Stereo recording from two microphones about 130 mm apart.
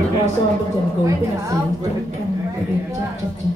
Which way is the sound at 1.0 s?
25° right (ahead or behind).